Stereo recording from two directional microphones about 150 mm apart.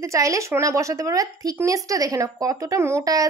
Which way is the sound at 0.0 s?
20° right (ahead or behind).